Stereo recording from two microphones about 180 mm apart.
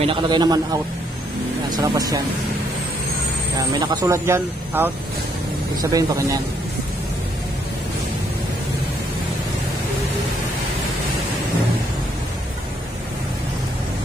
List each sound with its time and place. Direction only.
0.0 s speech: 25° right (ahead or behind)
1.7 s speech: 20° right (ahead or behind)
3.5 s speech: 20° right (ahead or behind)